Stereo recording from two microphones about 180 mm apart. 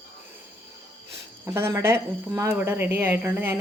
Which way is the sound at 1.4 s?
15° right (ahead or behind).